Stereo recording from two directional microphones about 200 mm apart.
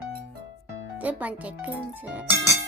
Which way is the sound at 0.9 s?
5° right (ahead or behind).